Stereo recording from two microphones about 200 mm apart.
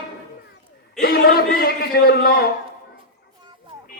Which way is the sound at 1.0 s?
5° left (ahead or behind).